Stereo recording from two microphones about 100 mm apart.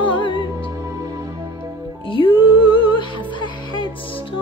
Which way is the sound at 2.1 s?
55° left (ahead or behind).